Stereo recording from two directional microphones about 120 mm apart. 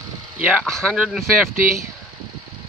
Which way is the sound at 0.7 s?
5° left (ahead or behind).